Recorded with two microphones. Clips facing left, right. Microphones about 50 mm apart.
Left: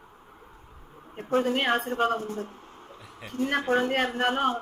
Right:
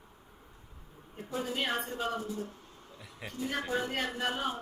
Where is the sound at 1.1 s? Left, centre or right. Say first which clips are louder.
Left 10 dB; left.